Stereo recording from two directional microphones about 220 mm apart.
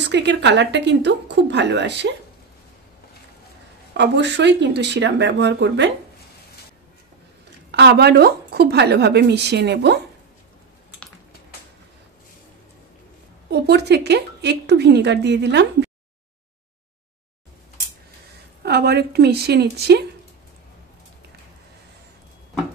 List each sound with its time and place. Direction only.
0.0 s a woman's voice: 50° right (ahead or behind)
3.9 s a woman's voice: 50° right (ahead or behind)
7.7 s a woman's voice: 50° right (ahead or behind)
13.5 s speech: 50° right (ahead or behind)
18.6 s a woman's voice: 45° right (ahead or behind)